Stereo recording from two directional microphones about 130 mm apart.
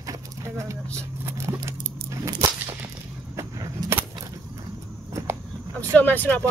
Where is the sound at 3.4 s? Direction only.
20° right (ahead or behind).